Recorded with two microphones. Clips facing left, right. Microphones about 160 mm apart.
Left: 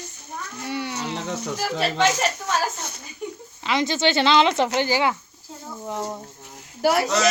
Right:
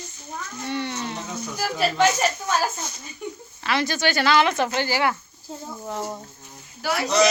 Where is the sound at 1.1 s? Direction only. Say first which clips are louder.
Left 4 dB; 90° left.